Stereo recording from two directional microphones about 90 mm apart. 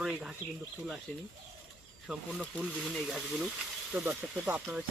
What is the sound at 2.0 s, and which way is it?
Speech, 5° right (ahead or behind).